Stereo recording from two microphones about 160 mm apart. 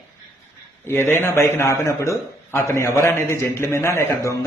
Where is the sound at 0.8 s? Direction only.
15° left (ahead or behind).